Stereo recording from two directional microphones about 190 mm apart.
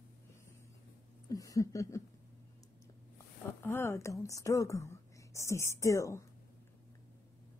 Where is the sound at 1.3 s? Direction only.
15° left (ahead or behind).